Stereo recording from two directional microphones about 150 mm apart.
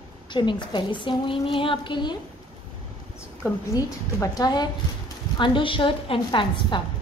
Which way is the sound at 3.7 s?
25° left (ahead or behind).